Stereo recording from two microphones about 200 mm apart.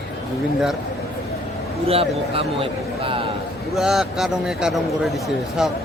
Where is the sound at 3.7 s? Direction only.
5° right (ahead or behind).